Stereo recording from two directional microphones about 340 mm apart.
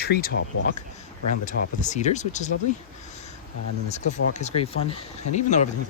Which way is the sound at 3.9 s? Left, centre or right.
Centre.